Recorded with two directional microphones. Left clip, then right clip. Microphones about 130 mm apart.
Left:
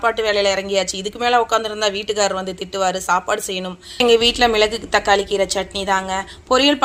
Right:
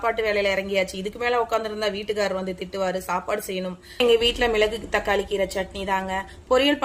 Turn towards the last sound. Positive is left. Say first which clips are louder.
# left 5 dB
turn(degrees=30)  # may be behind; listen again after turning